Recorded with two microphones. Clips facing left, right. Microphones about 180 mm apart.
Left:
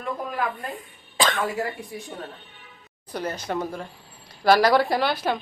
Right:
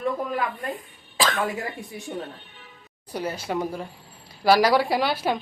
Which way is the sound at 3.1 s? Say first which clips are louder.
Even; 10° right (ahead or behind).